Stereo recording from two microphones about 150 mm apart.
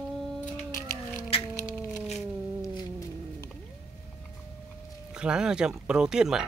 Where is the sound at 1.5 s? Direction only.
20° left (ahead or behind).